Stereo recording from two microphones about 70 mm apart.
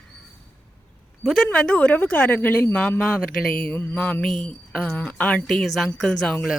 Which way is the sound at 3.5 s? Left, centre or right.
Centre.